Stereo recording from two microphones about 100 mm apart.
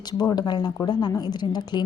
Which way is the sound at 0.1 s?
40° left (ahead or behind).